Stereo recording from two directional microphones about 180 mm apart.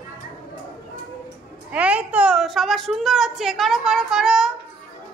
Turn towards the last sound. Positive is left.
turn(degrees=0)  # may be behind; listen again after turning